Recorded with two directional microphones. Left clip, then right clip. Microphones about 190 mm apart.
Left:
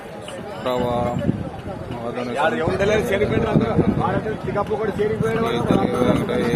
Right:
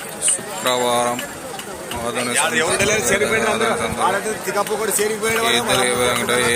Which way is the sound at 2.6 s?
25° left (ahead or behind).